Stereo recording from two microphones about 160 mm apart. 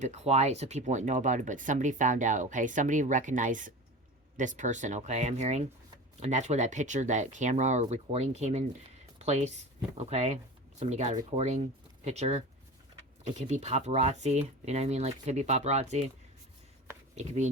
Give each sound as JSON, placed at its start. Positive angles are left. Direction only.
{"t": 0.0, "sound": "speech", "side_deg": -45}
{"t": 17.2, "sound": "speech", "side_deg": -45}